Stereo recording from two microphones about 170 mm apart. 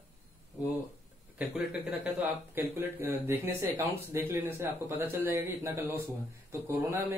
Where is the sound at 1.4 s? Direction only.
5° right (ahead or behind).